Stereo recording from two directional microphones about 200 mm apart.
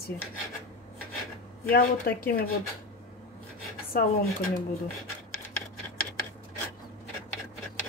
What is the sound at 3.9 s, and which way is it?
Speech, 45° left (ahead or behind).